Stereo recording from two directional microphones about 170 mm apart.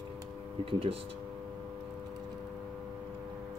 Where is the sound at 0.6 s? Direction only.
35° right (ahead or behind).